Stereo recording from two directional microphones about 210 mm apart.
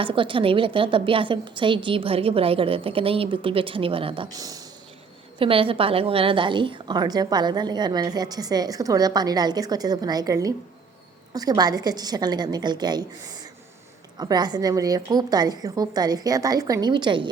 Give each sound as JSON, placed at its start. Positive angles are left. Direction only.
{"t": 0.0, "sound": "a woman's voice", "side_deg": -25}
{"t": 14.2, "sound": "a woman's voice", "side_deg": -20}